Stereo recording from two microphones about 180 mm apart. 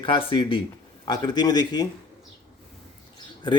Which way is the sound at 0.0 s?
30° left (ahead or behind).